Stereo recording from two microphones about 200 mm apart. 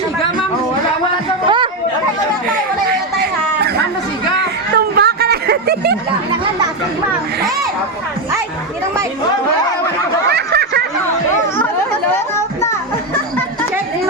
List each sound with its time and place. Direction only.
1.5 s chatter: 25° right (ahead or behind)
2.9 s a sound: 55° right (ahead or behind)
10.2 s snicker: 55° right (ahead or behind)